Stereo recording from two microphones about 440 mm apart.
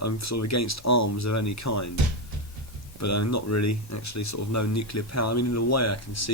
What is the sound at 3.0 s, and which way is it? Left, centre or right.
Speech, left.